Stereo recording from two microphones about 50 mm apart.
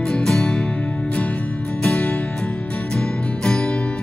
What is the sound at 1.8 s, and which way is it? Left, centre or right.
Music, left.